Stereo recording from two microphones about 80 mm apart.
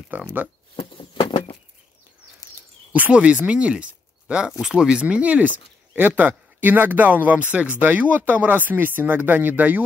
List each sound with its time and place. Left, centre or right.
0.1 s speech: right
0.9 s a sound: left
2.9 s speech: centre